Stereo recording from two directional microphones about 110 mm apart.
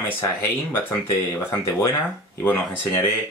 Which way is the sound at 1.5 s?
25° left (ahead or behind).